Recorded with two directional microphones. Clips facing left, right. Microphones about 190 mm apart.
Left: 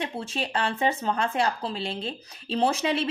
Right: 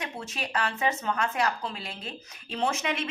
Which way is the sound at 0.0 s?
30° left (ahead or behind).